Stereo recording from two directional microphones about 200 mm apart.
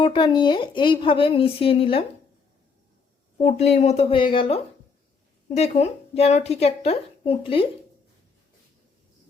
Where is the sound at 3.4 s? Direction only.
35° left (ahead or behind).